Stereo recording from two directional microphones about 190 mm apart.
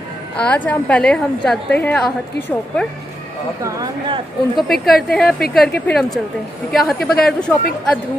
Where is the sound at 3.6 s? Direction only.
20° right (ahead or behind).